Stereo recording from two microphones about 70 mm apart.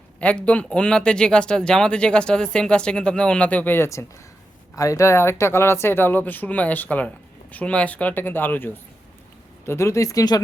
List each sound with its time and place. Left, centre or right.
0.2 s speech: centre
3.8 s speech: left
9.6 s speech: left